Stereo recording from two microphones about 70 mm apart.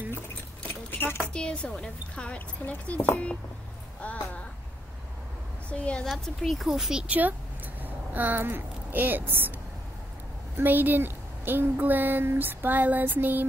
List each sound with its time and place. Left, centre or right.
0.7 s a sound: left
1.3 s speech: centre
5.7 s speech: centre
6.0 s speech: centre
7.8 s speech: right
10.6 s speech: right